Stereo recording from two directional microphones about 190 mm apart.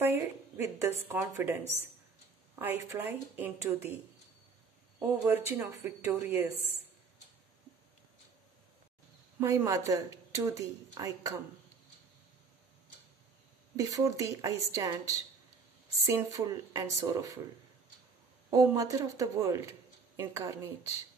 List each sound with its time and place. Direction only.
0.6 s speech: 10° right (ahead or behind)
2.6 s speech: 10° right (ahead or behind)
4.9 s speech: 10° right (ahead or behind)
9.4 s speech: 15° right (ahead or behind)
13.7 s speech: 15° right (ahead or behind)
18.5 s speech: 15° right (ahead or behind)